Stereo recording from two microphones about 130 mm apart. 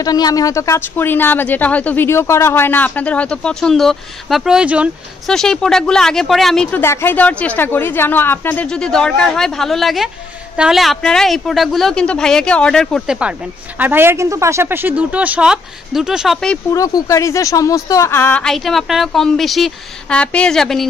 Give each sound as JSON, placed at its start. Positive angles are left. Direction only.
{"t": 0.0, "sound": "a woman's voice", "side_deg": 30}
{"t": 5.2, "sound": "a woman's voice", "side_deg": 5}
{"t": 6.8, "sound": "a woman's voice", "side_deg": 20}
{"t": 13.7, "sound": "speech", "side_deg": -15}
{"t": 16.7, "sound": "speech", "side_deg": 25}
{"t": 18.4, "sound": "a woman's voice", "side_deg": 0}